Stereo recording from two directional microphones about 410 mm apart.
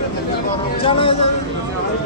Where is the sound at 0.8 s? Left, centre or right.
Centre.